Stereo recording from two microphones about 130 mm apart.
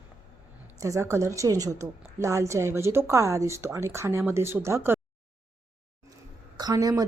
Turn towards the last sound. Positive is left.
turn(degrees=-25)  # may be behind; listen again after turning